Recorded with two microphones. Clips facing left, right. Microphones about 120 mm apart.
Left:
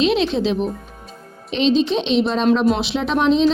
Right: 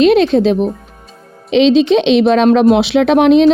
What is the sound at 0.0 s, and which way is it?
Speech, 55° right (ahead or behind).